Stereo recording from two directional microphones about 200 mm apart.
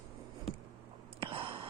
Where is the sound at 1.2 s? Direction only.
25° right (ahead or behind).